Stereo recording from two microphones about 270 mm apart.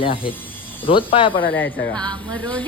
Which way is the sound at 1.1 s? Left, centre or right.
Centre.